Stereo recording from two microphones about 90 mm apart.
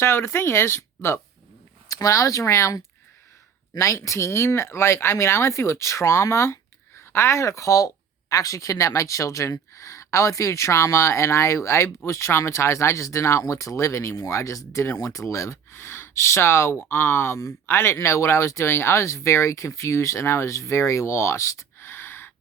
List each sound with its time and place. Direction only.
0.0 s speech: 30° left (ahead or behind)